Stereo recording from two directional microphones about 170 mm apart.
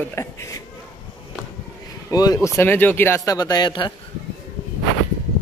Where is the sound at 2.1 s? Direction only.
20° left (ahead or behind).